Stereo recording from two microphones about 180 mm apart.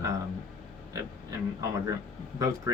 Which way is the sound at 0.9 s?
20° right (ahead or behind).